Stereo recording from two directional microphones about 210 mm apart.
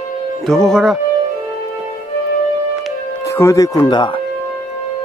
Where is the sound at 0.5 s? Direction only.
Centre (ahead or behind).